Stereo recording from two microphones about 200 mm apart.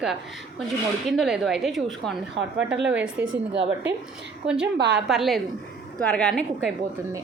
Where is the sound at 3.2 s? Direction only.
60° right (ahead or behind).